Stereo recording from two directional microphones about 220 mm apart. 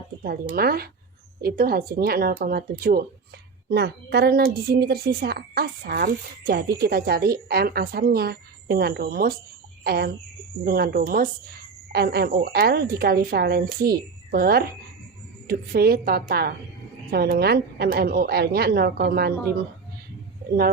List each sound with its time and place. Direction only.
0.5 s a woman's voice: 45° right (ahead or behind)